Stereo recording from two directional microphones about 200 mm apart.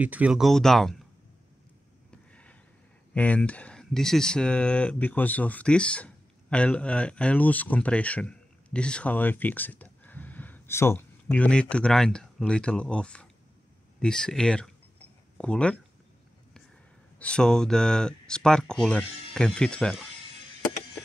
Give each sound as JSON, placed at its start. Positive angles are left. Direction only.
{"t": 0.0, "sound": "speech", "side_deg": -5}
{"t": 2.0, "sound": "a sound", "side_deg": 5}
{"t": 3.2, "sound": "speech", "side_deg": 5}
{"t": 17.2, "sound": "speech", "side_deg": 5}